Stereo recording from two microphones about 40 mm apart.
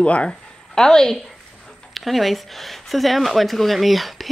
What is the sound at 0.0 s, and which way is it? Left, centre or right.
Speech, left.